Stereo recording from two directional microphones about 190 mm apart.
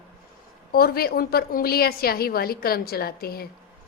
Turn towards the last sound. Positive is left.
turn(degrees=55)  # may be behind; listen again after turning